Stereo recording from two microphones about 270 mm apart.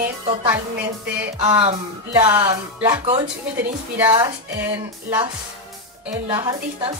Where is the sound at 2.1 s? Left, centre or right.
Centre.